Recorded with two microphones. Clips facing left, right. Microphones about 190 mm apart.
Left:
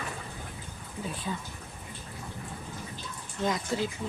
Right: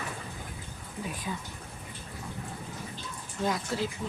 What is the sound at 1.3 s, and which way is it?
Speech, 10° right (ahead or behind).